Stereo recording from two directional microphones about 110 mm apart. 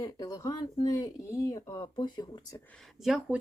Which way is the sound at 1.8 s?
45° left (ahead or behind).